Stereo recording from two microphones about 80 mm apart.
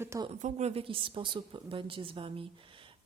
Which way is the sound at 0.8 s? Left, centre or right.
Right.